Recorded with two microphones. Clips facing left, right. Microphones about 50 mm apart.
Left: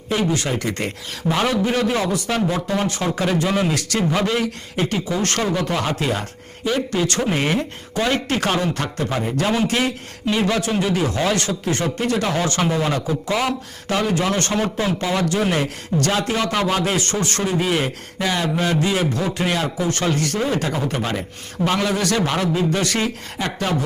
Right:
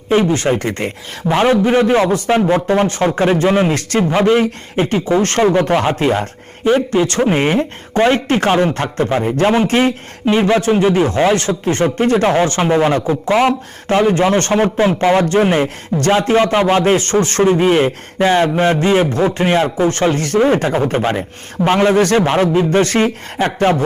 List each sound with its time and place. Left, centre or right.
0.1 s a man's voice: right